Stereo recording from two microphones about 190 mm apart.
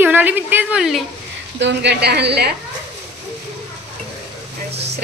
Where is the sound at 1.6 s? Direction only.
65° right (ahead or behind).